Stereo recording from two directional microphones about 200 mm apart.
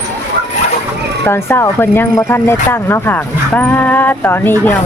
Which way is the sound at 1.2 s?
10° left (ahead or behind).